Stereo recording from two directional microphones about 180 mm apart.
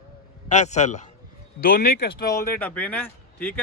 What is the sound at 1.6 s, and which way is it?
Speech, 60° left (ahead or behind).